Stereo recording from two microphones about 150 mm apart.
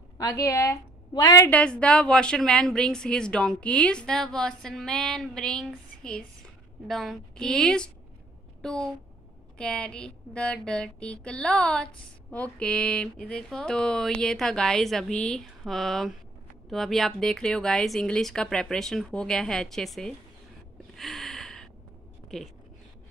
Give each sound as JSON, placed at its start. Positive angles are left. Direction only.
{"t": 0.2, "sound": "a woman's voice", "side_deg": 20}
{"t": 1.5, "sound": "speech", "side_deg": 10}
{"t": 20.9, "sound": "a sound", "side_deg": 0}